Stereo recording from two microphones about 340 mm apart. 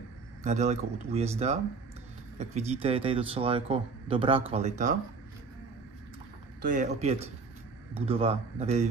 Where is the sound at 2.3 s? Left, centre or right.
Centre.